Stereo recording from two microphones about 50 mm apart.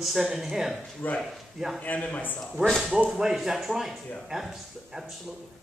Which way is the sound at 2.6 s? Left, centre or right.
Right.